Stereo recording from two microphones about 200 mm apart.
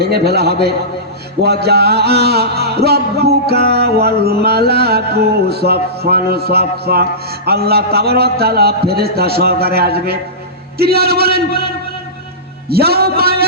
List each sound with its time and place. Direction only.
0.0 s a man's voice: 55° right (ahead or behind)
1.4 s music: 55° right (ahead or behind)
12.6 s music: 50° right (ahead or behind)